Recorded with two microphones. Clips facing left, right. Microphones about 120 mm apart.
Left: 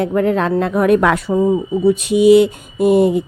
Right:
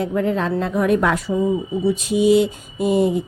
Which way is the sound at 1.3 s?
55° left (ahead or behind).